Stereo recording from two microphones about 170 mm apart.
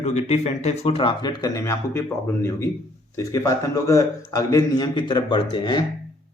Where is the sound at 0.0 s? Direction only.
40° left (ahead or behind).